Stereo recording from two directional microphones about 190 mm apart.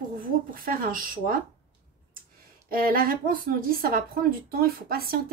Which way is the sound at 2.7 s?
50° right (ahead or behind).